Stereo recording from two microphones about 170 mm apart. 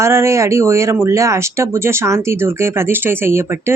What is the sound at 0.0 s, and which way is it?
Speech, 15° right (ahead or behind).